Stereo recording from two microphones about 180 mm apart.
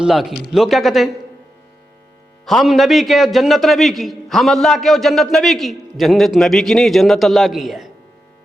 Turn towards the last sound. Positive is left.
turn(degrees=0)  # may be behind; listen again after turning